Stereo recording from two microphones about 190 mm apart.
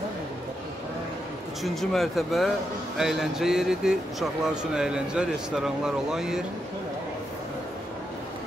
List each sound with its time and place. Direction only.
1.6 s speech: centre (ahead or behind)